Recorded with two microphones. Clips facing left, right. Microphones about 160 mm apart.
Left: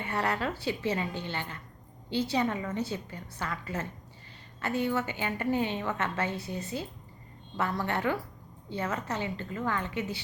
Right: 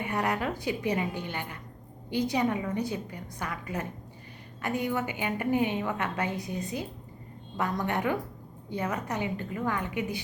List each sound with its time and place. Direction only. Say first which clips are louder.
0.0 s a woman's voice: right 1 dB; 15° right (ahead or behind)